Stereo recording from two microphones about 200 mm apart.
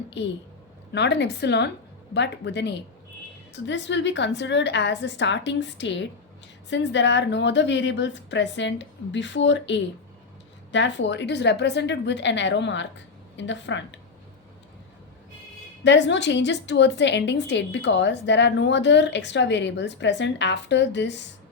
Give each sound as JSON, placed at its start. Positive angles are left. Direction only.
{"t": 0.2, "sound": "a woman's voice", "side_deg": 60}
{"t": 15.8, "sound": "a woman's voice", "side_deg": 60}